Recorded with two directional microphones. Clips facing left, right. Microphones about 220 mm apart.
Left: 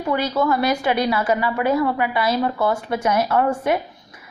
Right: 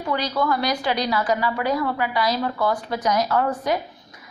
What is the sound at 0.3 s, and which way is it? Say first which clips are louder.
Speech: left 3 dB; 25° left (ahead or behind).